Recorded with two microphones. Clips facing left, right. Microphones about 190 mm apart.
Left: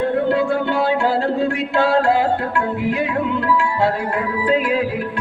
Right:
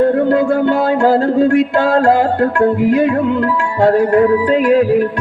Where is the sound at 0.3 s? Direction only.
45° right (ahead or behind).